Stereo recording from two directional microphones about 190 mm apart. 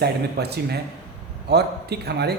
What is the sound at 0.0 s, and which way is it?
Speech, 60° right (ahead or behind).